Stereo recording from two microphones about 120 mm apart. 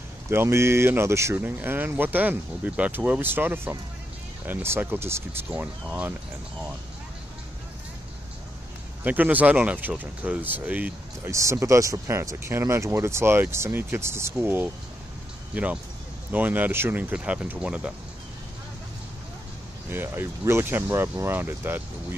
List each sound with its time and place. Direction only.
0.3 s speech: 20° right (ahead or behind)
9.0 s speech: 15° right (ahead or behind)
11.2 s speech: 25° right (ahead or behind); by 17.9 s 10° right (ahead or behind)
19.9 s speech: 20° right (ahead or behind)